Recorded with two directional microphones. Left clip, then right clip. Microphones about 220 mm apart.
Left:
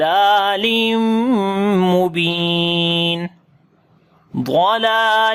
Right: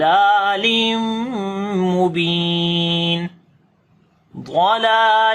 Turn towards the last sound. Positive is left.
turn(degrees=40)  # may be behind; listen again after turning